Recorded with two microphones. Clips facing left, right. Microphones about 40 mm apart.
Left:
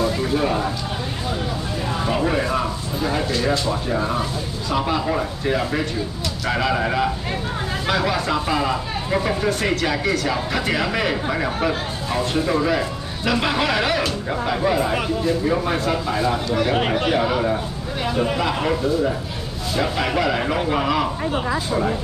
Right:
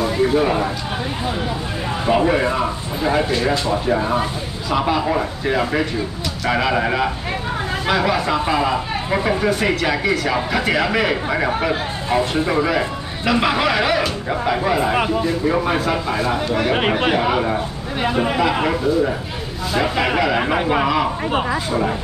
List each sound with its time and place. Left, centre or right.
0.0 s speech: centre
2.0 s speech: right
12.1 s speech: right
12.6 s speech: centre
16.7 s speech: right
20.3 s speech: right
20.8 s speech: centre